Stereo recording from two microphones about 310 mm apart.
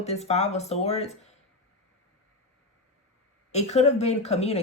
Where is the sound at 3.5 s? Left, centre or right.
Left.